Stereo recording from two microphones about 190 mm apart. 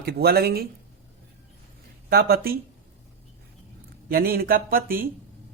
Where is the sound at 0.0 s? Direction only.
55° right (ahead or behind).